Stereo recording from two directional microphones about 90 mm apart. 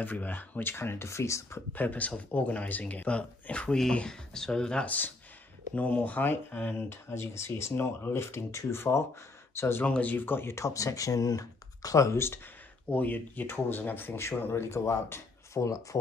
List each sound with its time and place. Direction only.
0.0 s speech: 20° left (ahead or behind)
1.7 s speech: 20° left (ahead or behind)
9.8 s speech: 15° left (ahead or behind); by 16.0 s 35° left (ahead or behind)